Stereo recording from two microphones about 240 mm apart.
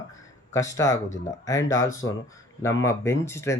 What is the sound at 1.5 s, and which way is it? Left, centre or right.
Speech, left.